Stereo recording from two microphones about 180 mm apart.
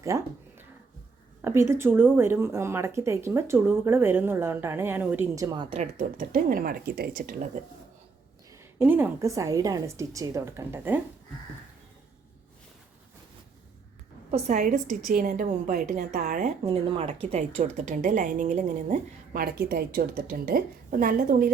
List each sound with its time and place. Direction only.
0.1 s speech: 20° right (ahead or behind)
1.4 s a woman's voice: 15° right (ahead or behind)
5.7 s a woman's voice: 45° right (ahead or behind)
8.8 s speech: 10° right (ahead or behind)
14.3 s a woman's voice: 35° right (ahead or behind)
16.6 s a woman's voice: 30° right (ahead or behind); by 21.5 s 50° right (ahead or behind)